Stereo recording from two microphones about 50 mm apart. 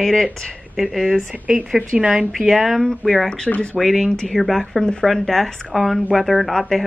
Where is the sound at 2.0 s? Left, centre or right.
Centre.